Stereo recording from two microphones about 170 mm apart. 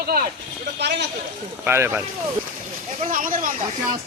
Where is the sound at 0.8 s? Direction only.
90° right.